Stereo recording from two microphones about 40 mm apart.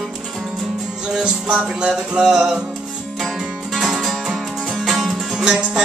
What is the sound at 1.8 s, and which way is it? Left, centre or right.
Music, centre.